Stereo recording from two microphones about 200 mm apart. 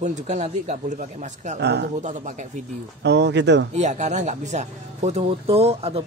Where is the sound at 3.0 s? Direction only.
60° right (ahead or behind).